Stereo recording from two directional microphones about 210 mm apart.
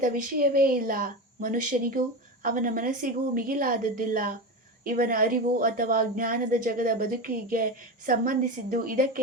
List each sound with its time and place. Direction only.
0.0 s speech: 40° right (ahead or behind)